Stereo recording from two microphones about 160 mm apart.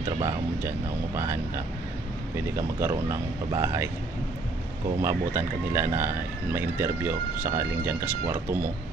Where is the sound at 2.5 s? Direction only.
15° right (ahead or behind).